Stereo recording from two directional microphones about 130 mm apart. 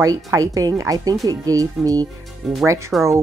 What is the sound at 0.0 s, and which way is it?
Speech, 25° right (ahead or behind).